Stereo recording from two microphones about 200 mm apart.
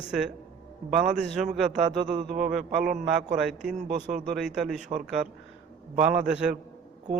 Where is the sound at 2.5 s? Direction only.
Centre (ahead or behind).